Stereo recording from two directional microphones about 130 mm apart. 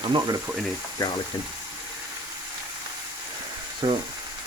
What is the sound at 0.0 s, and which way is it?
Speech, 35° right (ahead or behind).